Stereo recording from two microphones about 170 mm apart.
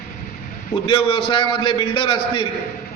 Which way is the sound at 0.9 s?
30° left (ahead or behind).